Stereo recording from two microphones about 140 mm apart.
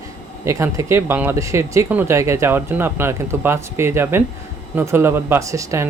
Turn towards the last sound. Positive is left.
turn(degrees=-20)  # may be behind; listen again after turning